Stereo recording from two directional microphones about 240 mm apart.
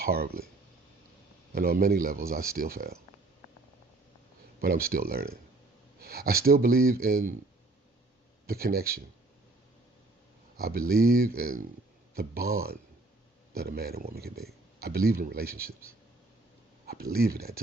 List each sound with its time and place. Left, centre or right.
0.0 s speech: right
1.5 s speech: right
4.6 s speech: right
8.4 s speech: right
10.6 s speech: right